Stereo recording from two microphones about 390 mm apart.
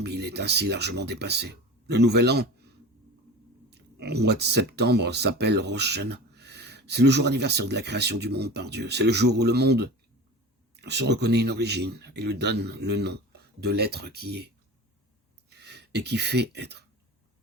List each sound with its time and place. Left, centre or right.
0.0 s speech: right
3.7 s speech: right